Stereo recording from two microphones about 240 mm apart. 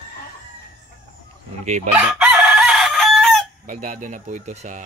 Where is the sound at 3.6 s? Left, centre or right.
Right.